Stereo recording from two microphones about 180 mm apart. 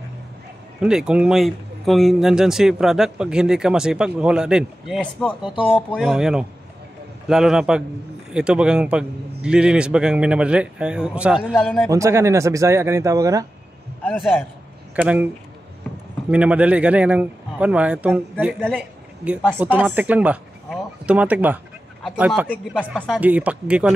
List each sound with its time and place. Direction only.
0.7 s speech: 5° right (ahead or behind)
11.9 s speech: 15° right (ahead or behind)
14.0 s speech: 5° left (ahead or behind)
15.0 s speech: 10° right (ahead or behind)
16.3 s speech: 5° right (ahead or behind)
23.2 s speech: 10° right (ahead or behind)